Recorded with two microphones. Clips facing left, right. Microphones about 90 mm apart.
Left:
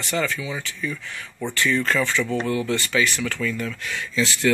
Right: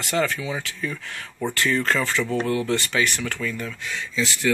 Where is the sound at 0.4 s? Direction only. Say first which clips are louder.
Right 1 dB; 45° right (ahead or behind).